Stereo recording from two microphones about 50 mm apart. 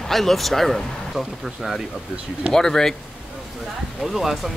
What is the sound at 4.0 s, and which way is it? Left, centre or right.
Speech, centre.